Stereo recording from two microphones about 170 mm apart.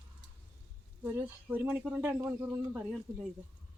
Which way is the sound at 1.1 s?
10° right (ahead or behind).